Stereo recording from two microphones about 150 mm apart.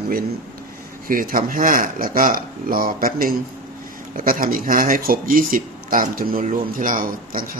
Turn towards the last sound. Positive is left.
turn(degrees=-70)  # may be behind; listen again after turning